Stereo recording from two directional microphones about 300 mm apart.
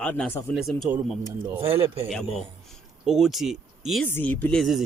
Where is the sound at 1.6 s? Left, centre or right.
Centre.